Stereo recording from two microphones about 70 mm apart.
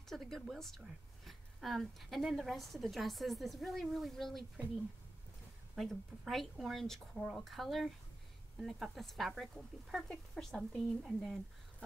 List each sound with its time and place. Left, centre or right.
0.1 s a woman's voice: centre
5.8 s a woman's voice: centre
10.0 s a woman's voice: centre